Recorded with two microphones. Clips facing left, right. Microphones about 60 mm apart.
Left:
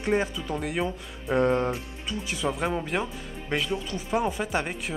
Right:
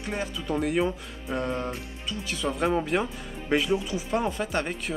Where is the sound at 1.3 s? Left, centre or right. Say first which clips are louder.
Left 7 dB; left.